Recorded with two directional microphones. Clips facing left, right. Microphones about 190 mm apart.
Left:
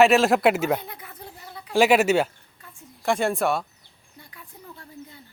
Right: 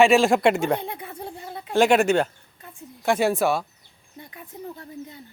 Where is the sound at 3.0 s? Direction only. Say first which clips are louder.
Right 2 dB; centre (ahead or behind).